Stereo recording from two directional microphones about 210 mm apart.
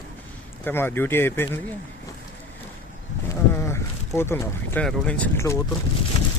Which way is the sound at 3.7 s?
10° left (ahead or behind).